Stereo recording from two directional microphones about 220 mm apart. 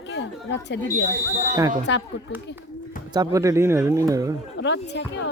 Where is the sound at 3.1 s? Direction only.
15° right (ahead or behind).